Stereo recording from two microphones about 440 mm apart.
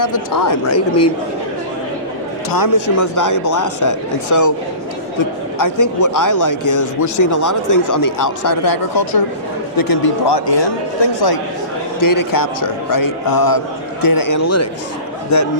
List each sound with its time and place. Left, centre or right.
0.0 s speech: left
2.5 s speech: left
5.5 s a man's voice: left
11.9 s speech: left